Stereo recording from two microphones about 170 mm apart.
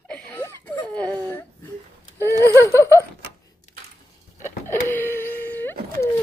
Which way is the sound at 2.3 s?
15° left (ahead or behind).